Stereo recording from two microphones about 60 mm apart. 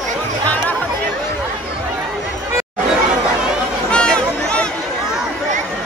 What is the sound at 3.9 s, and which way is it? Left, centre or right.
Chatter, centre.